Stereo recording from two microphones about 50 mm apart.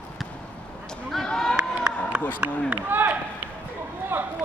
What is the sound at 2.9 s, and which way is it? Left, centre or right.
Run, right.